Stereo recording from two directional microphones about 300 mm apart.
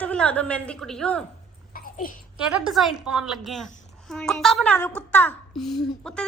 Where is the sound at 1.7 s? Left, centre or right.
Left.